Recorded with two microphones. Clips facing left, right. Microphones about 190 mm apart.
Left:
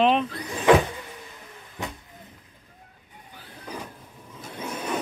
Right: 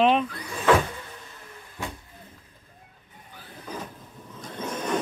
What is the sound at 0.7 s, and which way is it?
Vehicle, 15° left (ahead or behind).